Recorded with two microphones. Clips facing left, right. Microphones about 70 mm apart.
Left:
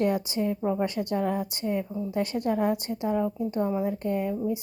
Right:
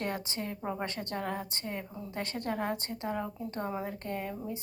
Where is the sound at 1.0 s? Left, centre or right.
Centre.